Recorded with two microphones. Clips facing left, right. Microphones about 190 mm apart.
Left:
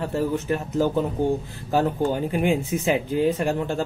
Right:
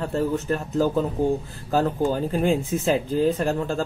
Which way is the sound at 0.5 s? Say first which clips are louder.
Even; 25° left (ahead or behind).